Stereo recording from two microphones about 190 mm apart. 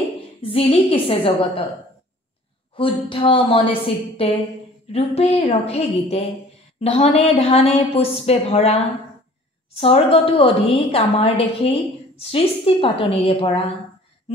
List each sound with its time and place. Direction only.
0.4 s a woman's voice: 30° left (ahead or behind)
2.7 s a woman's voice: 25° left (ahead or behind)